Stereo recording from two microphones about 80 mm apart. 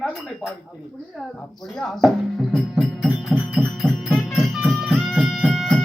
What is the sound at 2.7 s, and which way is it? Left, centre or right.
Music, centre.